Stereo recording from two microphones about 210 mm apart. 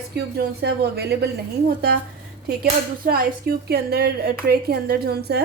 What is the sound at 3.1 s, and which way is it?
A woman's voice, 45° right (ahead or behind).